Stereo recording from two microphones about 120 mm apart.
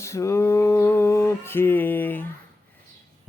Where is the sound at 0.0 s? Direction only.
25° left (ahead or behind).